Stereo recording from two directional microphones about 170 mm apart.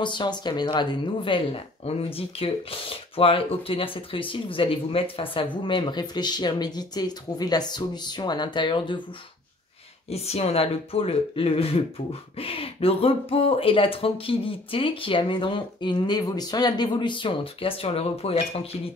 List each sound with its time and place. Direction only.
0.0 s speech: 25° left (ahead or behind)
10.0 s speech: 35° left (ahead or behind)